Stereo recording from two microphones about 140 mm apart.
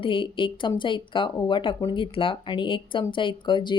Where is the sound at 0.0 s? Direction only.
40° left (ahead or behind).